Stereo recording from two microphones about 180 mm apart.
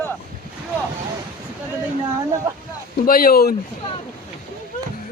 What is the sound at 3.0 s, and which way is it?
Speech, 55° left (ahead or behind).